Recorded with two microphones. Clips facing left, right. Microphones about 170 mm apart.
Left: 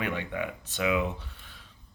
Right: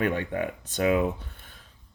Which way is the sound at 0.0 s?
45° right (ahead or behind).